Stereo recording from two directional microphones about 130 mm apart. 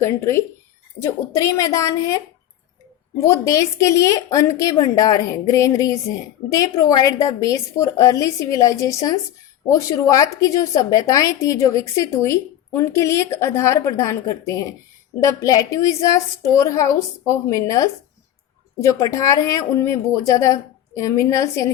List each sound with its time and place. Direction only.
0.0 s a woman's voice: 20° left (ahead or behind)
3.2 s a woman's voice: 25° left (ahead or behind)